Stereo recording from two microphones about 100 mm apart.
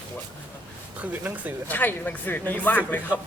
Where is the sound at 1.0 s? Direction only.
15° right (ahead or behind).